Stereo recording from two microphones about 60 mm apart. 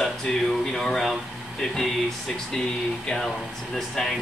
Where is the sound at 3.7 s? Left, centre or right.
Centre.